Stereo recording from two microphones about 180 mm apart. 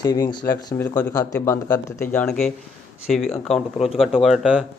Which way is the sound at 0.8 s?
10° left (ahead or behind).